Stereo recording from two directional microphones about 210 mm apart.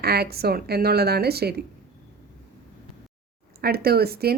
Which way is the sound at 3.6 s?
45° right (ahead or behind).